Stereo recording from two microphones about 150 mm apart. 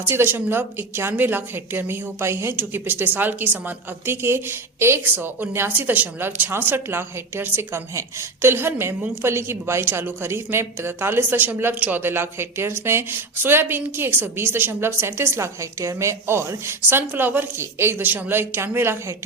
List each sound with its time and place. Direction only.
0.0 s a woman's voice: 15° right (ahead or behind)